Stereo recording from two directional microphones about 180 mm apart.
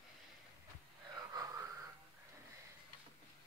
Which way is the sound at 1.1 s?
20° right (ahead or behind).